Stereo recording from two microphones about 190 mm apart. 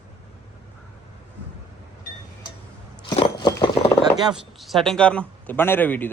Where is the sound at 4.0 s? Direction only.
20° right (ahead or behind).